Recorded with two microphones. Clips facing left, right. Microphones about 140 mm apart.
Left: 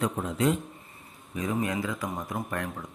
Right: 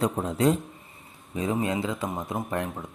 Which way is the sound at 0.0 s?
35° right (ahead or behind).